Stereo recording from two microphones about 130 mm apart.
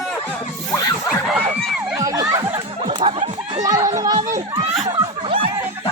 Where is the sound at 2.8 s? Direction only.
45° right (ahead or behind).